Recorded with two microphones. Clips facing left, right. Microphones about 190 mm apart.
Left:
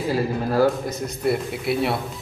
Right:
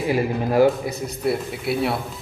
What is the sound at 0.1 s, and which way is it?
Speech, 15° right (ahead or behind).